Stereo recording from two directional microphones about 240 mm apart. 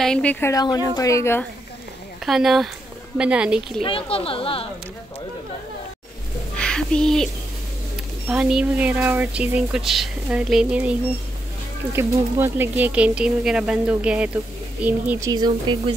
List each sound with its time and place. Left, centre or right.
0.0 s a woman's voice: centre
2.2 s speech: centre
3.8 s speech: left
6.5 s music: centre
8.3 s speech: centre